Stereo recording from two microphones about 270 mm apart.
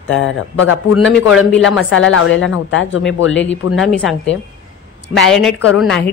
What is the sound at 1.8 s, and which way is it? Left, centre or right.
A woman's voice, left.